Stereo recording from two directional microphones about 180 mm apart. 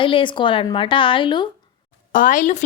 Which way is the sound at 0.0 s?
30° left (ahead or behind).